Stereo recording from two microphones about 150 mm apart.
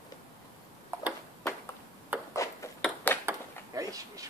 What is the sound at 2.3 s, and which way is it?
Ping, 20° left (ahead or behind).